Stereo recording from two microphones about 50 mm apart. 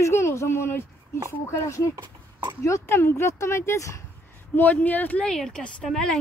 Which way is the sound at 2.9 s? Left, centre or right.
Left.